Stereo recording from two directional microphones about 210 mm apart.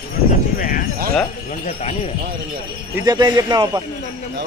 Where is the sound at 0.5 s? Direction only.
40° left (ahead or behind).